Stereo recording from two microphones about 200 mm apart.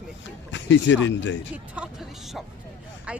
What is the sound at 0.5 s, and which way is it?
Speech, 65° left (ahead or behind).